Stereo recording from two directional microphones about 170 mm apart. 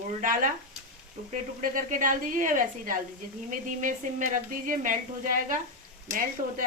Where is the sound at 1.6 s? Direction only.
50° right (ahead or behind).